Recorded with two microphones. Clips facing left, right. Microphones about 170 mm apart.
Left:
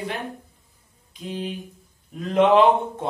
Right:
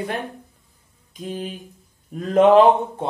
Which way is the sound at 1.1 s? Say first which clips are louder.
Right 1 dB; 45° right (ahead or behind).